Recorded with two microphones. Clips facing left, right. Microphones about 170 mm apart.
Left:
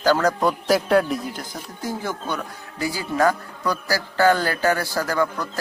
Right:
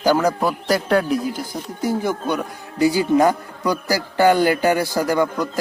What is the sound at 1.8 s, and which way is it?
Speech, 15° right (ahead or behind).